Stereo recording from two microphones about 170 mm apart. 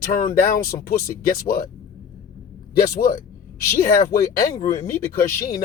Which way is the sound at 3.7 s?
60° left (ahead or behind).